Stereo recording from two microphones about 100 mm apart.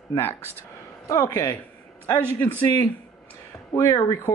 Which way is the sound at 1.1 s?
35° left (ahead or behind).